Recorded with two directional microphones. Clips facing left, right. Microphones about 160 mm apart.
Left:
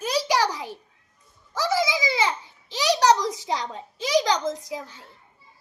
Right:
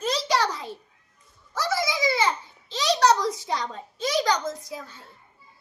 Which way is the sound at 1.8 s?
90° left.